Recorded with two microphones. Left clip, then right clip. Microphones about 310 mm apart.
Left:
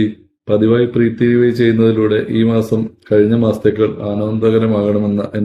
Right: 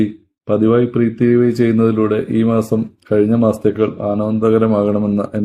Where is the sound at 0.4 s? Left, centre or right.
Right.